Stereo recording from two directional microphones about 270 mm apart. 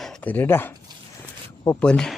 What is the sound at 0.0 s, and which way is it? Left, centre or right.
Speech, centre.